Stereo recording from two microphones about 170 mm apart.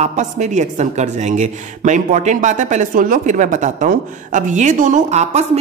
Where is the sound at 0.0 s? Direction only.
45° right (ahead or behind).